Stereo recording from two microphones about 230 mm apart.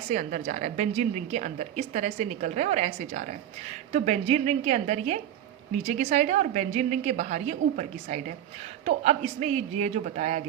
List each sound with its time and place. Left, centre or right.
0.1 s a woman's voice: right